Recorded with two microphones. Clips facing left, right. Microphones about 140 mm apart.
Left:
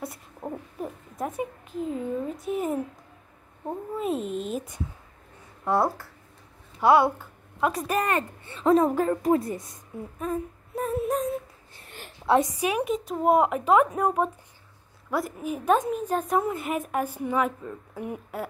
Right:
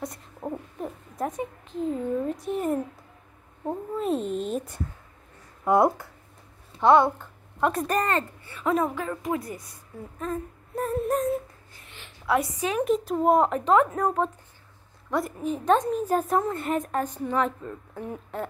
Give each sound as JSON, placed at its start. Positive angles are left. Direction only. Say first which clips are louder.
{"t": 0.0, "sound": "owl", "louder": "right 1 dB", "side_deg": 0}
{"t": 3.9, "sound": "speech", "louder": "right 1 dB", "side_deg": 0}
{"t": 5.7, "sound": "speech", "louder": "right 4 dB", "side_deg": -20}
{"t": 6.8, "sound": "a woman's voice", "louder": "right 1 dB", "side_deg": 5}
{"t": 8.5, "sound": "a woman's voice", "louder": "left 6 dB", "side_deg": 30}
{"t": 9.4, "sound": "a woman's voice", "louder": "left 5 dB", "side_deg": 25}
{"t": 10.1, "sound": "a woman's voice", "louder": "left 1 dB", "side_deg": 10}
{"t": 11.8, "sound": "a sound", "louder": "left 5 dB", "side_deg": 45}
{"t": 12.3, "sound": "a woman's voice", "louder": "left 3 dB", "side_deg": 20}
{"t": 12.8, "sound": "a woman's voice", "louder": "right 5 dB", "side_deg": 0}